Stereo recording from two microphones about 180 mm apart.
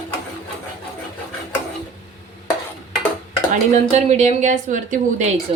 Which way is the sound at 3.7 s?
40° right (ahead or behind).